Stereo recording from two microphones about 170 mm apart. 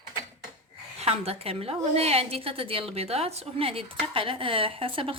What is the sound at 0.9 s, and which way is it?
A woman's voice, 35° right (ahead or behind).